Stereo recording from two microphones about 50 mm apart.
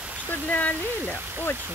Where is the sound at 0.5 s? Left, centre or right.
Left.